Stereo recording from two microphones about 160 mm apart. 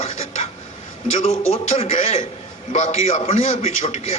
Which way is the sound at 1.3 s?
40° left (ahead or behind).